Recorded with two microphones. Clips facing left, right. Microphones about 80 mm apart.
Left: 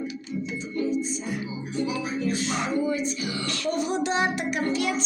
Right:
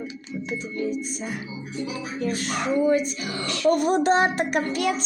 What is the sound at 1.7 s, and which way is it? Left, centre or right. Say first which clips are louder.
Speech: left 3 dB; left.